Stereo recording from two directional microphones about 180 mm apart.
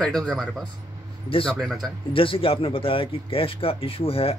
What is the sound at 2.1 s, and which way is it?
Speech, 30° left (ahead or behind).